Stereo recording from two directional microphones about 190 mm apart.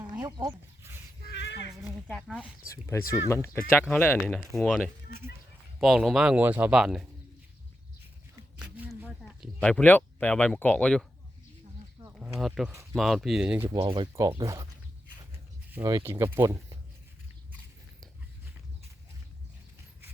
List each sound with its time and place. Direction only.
0.0 s a sound: 20° right (ahead or behind)
1.3 s a sound: 65° left (ahead or behind)
2.0 s speech: centre (ahead or behind)
2.6 s speech: 15° left (ahead or behind); by 7.1 s 5° right (ahead or behind)
8.5 s a sound: 5° right (ahead or behind)
9.2 s speech: 5° left (ahead or behind)
12.1 s speech: centre (ahead or behind)
13.8 s speech: 25° right (ahead or behind)
14.2 s speech: 15° right (ahead or behind)
15.7 s speech: 15° right (ahead or behind)